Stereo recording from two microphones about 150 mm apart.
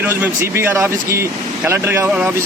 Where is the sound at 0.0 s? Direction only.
15° right (ahead or behind).